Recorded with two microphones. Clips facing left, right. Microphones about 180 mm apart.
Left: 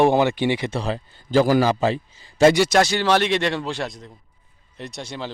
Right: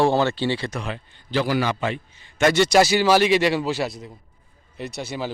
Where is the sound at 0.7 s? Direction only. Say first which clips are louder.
Left 5 dB; 35° left (ahead or behind).